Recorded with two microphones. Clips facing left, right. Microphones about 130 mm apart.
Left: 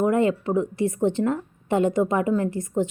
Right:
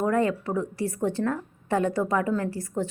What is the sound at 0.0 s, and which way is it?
A woman's voice, 20° left (ahead or behind).